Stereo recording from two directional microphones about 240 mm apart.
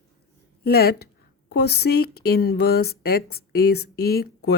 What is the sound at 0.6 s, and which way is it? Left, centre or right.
A woman's voice, left.